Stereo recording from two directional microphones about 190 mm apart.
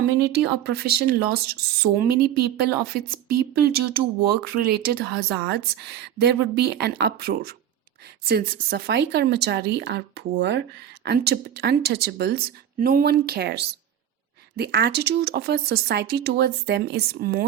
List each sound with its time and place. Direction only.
0.2 s a woman's voice: 60° right (ahead or behind)